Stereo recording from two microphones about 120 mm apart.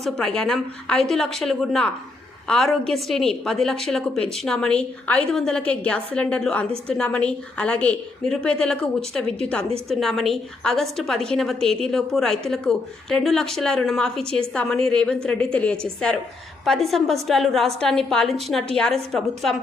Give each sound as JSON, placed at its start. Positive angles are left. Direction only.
{"t": 0.0, "sound": "a woman's voice", "side_deg": 5}